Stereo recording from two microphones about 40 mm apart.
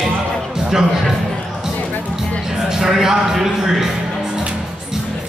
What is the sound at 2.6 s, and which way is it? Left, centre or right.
Speech, centre.